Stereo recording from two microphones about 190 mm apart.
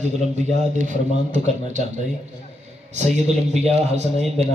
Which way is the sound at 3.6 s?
35° right (ahead or behind).